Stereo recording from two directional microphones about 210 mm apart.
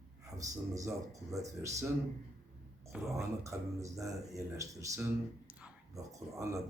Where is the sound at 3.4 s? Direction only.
15° right (ahead or behind).